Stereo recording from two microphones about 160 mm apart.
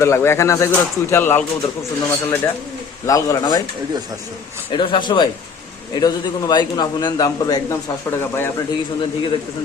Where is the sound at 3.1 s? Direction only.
20° left (ahead or behind).